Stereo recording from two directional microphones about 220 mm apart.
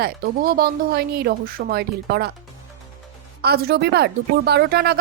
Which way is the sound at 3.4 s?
45° right (ahead or behind).